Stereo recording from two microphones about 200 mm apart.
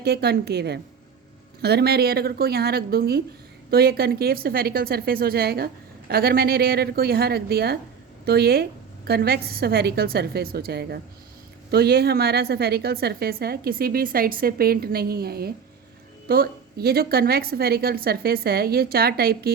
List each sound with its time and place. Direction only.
0.0 s a woman's voice: 55° right (ahead or behind)